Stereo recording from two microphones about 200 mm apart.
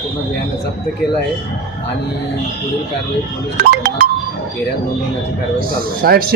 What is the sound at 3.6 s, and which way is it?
Music, 50° right (ahead or behind).